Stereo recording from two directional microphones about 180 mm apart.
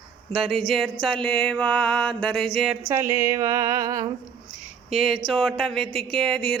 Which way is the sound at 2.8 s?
15° right (ahead or behind).